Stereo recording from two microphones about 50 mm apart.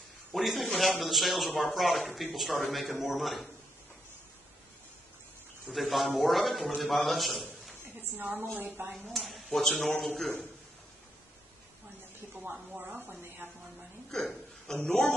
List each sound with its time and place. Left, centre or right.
0.3 s a man's voice: centre
5.7 s a man's voice: centre
8.2 s speech: right
9.1 s a man's voice: centre
14.1 s hiccup: centre
14.9 s a man's voice: centre